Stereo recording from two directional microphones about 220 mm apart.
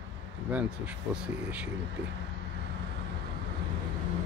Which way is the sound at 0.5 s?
5° right (ahead or behind).